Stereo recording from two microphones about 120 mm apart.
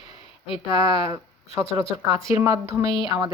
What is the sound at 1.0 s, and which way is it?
Speech, 25° right (ahead or behind).